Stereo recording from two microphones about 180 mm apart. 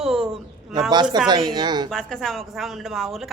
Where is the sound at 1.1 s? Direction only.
25° right (ahead or behind).